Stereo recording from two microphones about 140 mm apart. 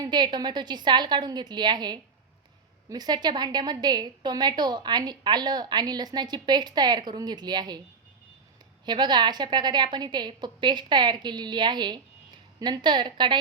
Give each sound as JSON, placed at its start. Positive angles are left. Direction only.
{"t": 0.0, "sound": "a woman's voice", "side_deg": -30}
{"t": 8.9, "sound": "a woman's voice", "side_deg": -30}